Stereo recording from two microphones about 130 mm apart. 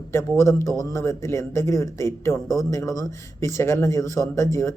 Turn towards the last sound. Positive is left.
turn(degrees=25)  # may be behind; listen again after turning